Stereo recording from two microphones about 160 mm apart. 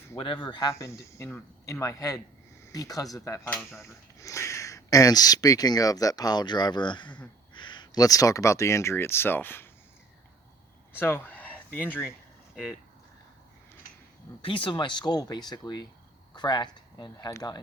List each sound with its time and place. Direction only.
0.2 s speech: 30° left (ahead or behind)
0.7 s speech: 15° left (ahead or behind)
10.9 s speech: 15° left (ahead or behind)
14.4 s speech: 30° left (ahead or behind)